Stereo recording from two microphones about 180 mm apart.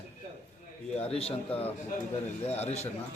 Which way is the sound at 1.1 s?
30° left (ahead or behind).